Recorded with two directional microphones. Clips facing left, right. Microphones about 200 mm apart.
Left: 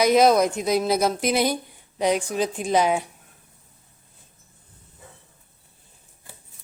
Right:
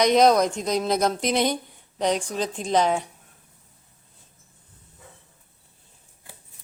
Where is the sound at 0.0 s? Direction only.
5° left (ahead or behind).